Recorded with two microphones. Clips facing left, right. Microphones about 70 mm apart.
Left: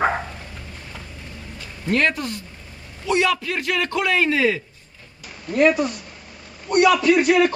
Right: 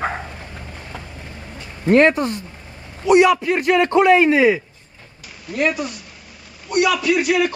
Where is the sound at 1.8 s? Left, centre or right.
Right.